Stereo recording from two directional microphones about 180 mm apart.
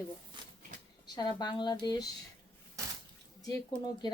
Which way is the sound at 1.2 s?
25° left (ahead or behind).